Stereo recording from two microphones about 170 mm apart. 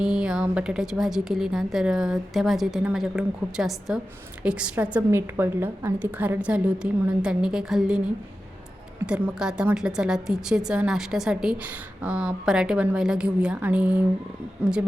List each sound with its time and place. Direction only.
0.0 s a woman's voice: 5° right (ahead or behind)